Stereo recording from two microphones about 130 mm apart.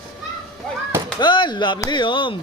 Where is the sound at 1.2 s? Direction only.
35° left (ahead or behind).